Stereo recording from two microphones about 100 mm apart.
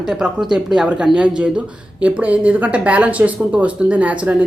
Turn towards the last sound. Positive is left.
turn(degrees=-15)  # may be behind; listen again after turning